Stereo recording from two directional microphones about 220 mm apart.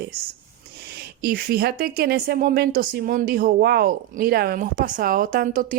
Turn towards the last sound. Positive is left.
turn(degrees=-40)  # may be behind; listen again after turning